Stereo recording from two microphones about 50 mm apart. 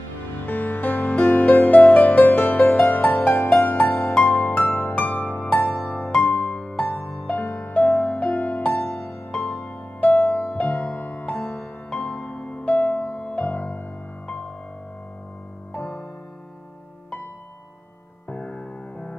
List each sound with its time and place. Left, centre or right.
0.5 s music: left
11.9 s music: left
14.2 s music: left
18.3 s music: left